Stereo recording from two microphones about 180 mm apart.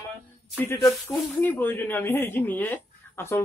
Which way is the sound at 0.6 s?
15° left (ahead or behind).